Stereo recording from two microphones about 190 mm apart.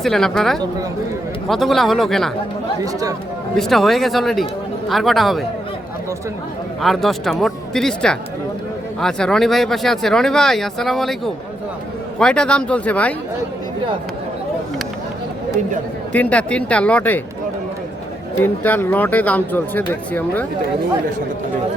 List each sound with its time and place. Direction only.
0.0 s speech: centre (ahead or behind)
2.8 s speech: 20° right (ahead or behind)
3.6 s speech: centre (ahead or behind)
6.8 s speech: centre (ahead or behind)
12.2 s speech: 5° left (ahead or behind)
16.1 s speech: 5° left (ahead or behind)
18.3 s speech: 10° left (ahead or behind)